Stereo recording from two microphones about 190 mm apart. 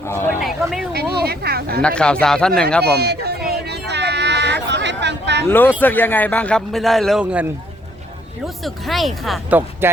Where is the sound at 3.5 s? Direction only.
60° right (ahead or behind).